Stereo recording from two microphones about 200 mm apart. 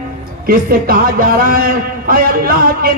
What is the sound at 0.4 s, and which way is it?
A man's voice, 45° right (ahead or behind).